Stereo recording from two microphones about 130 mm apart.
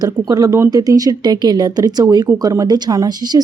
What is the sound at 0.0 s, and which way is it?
Speech, 30° right (ahead or behind).